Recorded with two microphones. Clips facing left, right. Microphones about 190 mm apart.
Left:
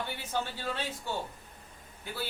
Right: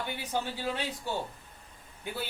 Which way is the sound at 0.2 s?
15° right (ahead or behind).